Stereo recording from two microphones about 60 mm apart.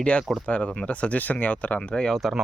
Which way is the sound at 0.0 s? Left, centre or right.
Centre.